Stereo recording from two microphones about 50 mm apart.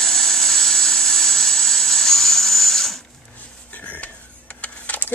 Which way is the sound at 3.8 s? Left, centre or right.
Left.